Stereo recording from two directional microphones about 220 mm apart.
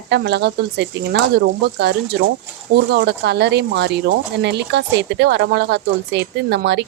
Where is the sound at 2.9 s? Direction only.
50° right (ahead or behind).